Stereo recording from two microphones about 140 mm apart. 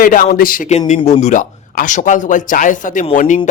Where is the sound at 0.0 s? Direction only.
80° left.